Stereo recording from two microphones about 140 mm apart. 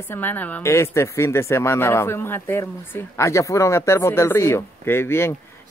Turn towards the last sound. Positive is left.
turn(degrees=15)  # may be behind; listen again after turning